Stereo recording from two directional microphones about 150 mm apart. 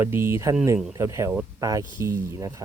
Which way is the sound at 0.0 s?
15° right (ahead or behind).